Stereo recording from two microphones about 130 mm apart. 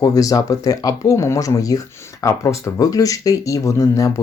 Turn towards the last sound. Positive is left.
turn(degrees=25)  # may be behind; listen again after turning